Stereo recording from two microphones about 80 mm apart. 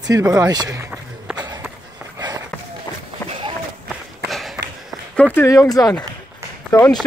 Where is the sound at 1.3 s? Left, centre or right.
Right.